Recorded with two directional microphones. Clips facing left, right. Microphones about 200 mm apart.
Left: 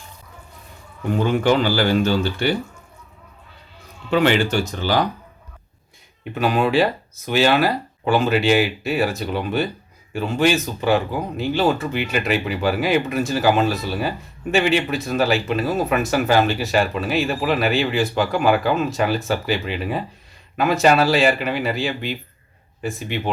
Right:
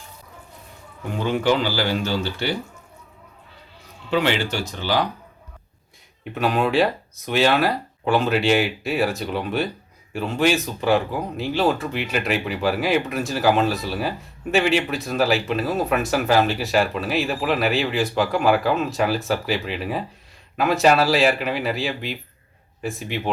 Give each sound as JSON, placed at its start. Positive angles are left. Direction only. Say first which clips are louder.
{"t": 1.2, "sound": "speech", "louder": "left 2 dB", "side_deg": 50}
{"t": 4.1, "sound": "speech", "louder": "left 4 dB", "side_deg": 50}
{"t": 6.3, "sound": "speech", "louder": "left 2 dB", "side_deg": 0}